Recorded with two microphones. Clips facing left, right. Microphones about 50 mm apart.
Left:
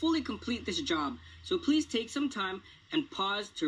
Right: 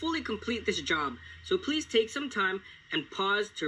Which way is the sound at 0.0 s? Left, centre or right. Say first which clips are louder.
Left 2 dB; right.